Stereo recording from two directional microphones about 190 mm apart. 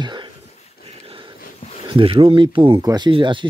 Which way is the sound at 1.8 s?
25° right (ahead or behind).